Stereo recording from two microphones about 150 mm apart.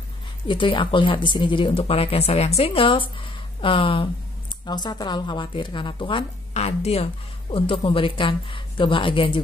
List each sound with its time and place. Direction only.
0.5 s speech: 35° left (ahead or behind)